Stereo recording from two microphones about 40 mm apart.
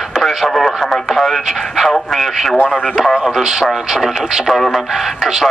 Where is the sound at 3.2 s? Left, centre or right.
Centre.